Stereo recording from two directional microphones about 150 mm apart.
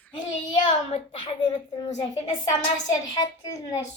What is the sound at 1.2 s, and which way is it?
A child's voice, 30° left (ahead or behind).